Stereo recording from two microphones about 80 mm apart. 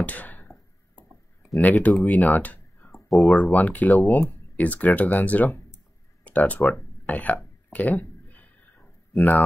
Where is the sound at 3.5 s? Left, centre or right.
Centre.